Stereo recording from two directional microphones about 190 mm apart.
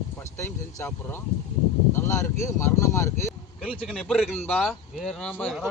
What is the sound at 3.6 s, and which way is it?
Speech, 5° right (ahead or behind).